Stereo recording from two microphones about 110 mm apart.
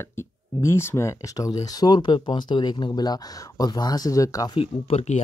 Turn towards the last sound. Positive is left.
turn(degrees=80)